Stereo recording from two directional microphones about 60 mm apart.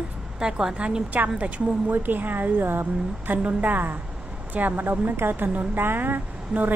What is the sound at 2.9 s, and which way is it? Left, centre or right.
A woman's voice, centre.